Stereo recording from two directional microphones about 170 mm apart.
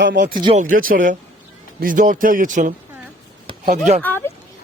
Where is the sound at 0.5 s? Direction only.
50° right (ahead or behind).